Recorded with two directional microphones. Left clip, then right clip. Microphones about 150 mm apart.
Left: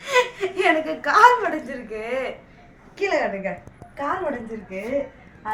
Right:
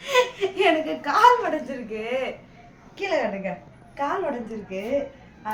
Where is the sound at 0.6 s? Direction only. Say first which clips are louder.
Left 1 dB; 25° left (ahead or behind).